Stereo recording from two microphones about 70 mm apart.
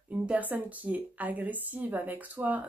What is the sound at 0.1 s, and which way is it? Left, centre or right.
Speech, right.